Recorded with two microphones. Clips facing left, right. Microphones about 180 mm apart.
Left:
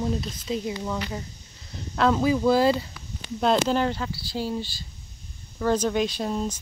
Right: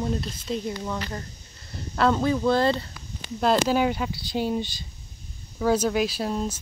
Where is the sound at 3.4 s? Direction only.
5° right (ahead or behind).